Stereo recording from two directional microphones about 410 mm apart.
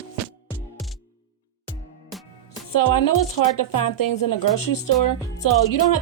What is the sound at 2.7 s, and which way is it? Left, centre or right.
Speech, left.